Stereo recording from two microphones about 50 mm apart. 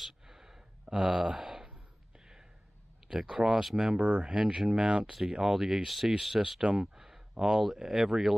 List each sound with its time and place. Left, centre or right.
0.0 s a sound: centre
3.1 s speech: centre
3.9 s speech: right; by 6.4 s centre
6.4 s speech: centre